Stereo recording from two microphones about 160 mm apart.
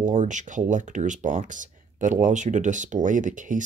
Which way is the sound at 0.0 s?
50° right (ahead or behind).